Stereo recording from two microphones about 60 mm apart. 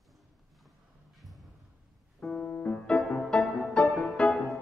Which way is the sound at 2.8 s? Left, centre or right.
Centre.